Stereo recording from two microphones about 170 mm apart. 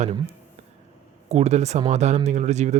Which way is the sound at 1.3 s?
40° right (ahead or behind).